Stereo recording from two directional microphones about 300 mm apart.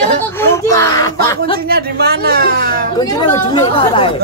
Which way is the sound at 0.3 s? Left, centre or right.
Centre.